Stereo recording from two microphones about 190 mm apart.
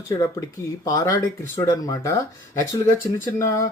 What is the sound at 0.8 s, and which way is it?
Speech, 20° left (ahead or behind).